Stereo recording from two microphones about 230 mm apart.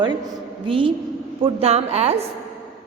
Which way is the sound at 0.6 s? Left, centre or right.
Right.